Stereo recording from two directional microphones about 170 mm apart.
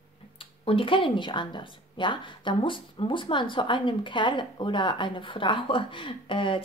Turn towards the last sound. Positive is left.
turn(degrees=30)  # may be behind; listen again after turning